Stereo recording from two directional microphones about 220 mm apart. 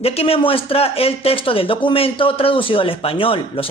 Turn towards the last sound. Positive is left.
turn(degrees=25)  # may be behind; listen again after turning